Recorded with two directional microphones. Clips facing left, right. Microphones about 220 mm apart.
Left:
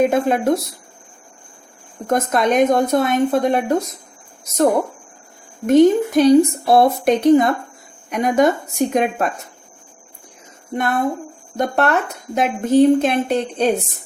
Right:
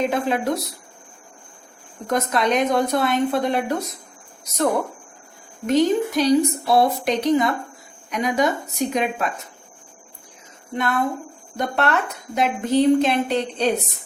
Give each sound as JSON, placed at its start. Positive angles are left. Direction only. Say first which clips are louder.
{"t": 0.0, "sound": "speech", "louder": "left 5 dB", "side_deg": 50}
{"t": 2.0, "sound": "speech", "louder": "left 3 dB", "side_deg": 50}
{"t": 5.6, "sound": "speech", "louder": "left 6 dB", "side_deg": 50}
{"t": 10.8, "sound": "speech", "louder": "left 3 dB", "side_deg": 45}